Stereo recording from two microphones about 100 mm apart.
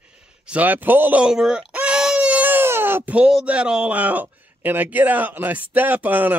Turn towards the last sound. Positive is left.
turn(degrees=-20)  # may be behind; listen again after turning